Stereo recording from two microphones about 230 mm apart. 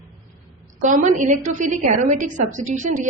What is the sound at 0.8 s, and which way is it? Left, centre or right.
A woman's voice, right.